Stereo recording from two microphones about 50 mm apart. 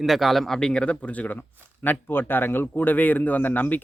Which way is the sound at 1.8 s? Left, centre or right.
Left.